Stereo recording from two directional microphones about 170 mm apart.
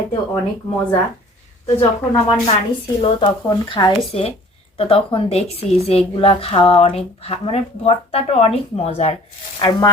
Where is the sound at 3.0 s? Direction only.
30° left (ahead or behind).